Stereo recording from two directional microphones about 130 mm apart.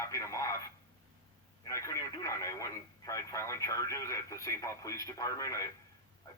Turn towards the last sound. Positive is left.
turn(degrees=25)  # may be behind; listen again after turning